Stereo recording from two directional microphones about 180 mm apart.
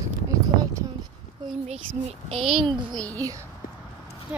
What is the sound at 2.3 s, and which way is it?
Speech, centre (ahead or behind).